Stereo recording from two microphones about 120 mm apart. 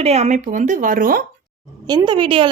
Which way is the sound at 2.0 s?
40° right (ahead or behind).